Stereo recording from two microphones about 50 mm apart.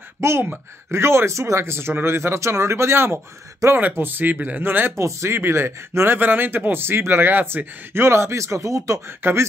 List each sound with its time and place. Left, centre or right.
0.4 s speech: right
3.6 s speech: right
4.0 s speech: right
4.9 s speech: right
5.4 s speech: right
9.2 s speech: right